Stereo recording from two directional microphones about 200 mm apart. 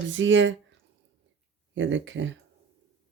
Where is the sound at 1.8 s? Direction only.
70° right (ahead or behind).